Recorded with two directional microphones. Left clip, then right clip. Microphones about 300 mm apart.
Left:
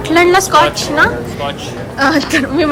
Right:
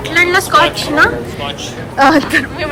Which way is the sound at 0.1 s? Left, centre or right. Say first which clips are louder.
Left 1 dB; centre.